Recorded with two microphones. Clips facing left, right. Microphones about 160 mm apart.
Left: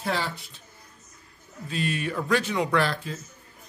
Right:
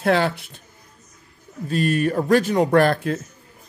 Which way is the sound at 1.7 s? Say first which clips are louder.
Right 9 dB; 45° right (ahead or behind).